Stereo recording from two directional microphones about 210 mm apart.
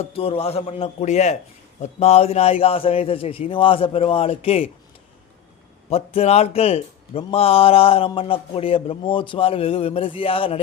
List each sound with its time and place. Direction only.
0.0 s a man's voice: 25° left (ahead or behind)
5.9 s a man's voice: 30° left (ahead or behind)